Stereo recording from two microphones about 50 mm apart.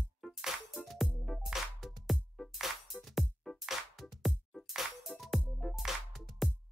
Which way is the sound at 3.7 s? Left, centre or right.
Centre.